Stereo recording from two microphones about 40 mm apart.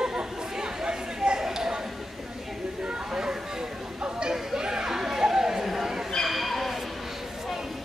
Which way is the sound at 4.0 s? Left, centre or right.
Right.